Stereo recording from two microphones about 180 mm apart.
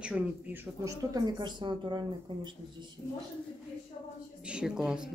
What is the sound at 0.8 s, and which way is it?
Speech, 20° right (ahead or behind).